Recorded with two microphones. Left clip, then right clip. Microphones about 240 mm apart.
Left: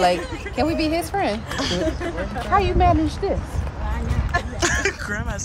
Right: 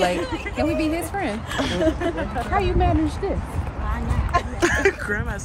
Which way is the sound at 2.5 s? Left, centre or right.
Left.